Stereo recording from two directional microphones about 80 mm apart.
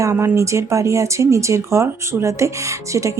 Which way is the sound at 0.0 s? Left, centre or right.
Right.